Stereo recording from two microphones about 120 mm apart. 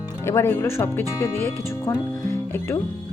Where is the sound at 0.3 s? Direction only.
20° left (ahead or behind).